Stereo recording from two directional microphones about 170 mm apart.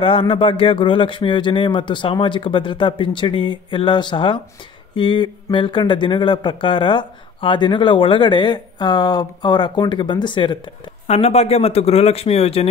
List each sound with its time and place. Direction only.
0.0 s speech: 30° left (ahead or behind)